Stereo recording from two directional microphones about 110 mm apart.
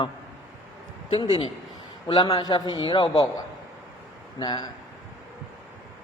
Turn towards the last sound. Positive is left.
turn(degrees=40)  # may be behind; listen again after turning